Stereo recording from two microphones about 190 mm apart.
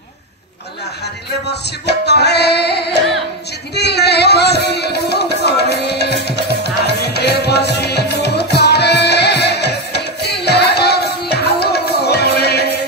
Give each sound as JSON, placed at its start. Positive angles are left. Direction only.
{"t": 1.5, "sound": "music", "side_deg": 60}